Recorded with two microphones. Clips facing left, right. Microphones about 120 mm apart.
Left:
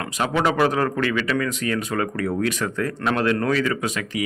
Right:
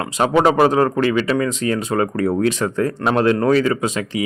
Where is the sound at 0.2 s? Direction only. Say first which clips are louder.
Right 6 dB; 35° right (ahead or behind).